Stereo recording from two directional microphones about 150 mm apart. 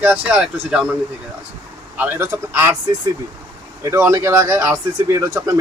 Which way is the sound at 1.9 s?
15° right (ahead or behind).